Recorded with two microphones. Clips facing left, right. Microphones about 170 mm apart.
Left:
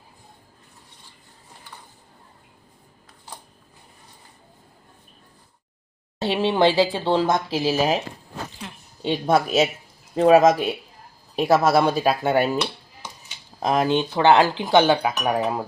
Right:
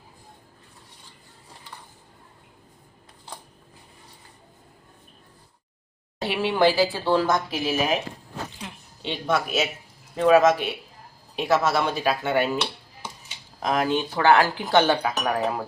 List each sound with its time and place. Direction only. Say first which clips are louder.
6.1 s speech: left 3 dB; 30° left (ahead or behind)
9.0 s speech: left 5 dB; 40° left (ahead or behind)
13.6 s speech: left 3 dB; 30° left (ahead or behind)